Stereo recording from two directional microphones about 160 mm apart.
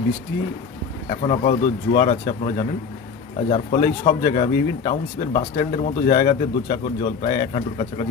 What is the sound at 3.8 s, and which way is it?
Speech, 60° left (ahead or behind).